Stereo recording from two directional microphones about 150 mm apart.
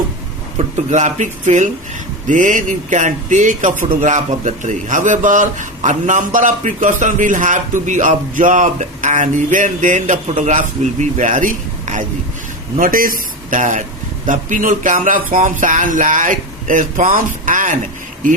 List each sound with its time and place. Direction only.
0.9 s speech: 55° right (ahead or behind)